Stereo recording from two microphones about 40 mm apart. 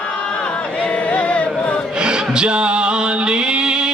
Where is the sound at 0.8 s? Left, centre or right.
Left.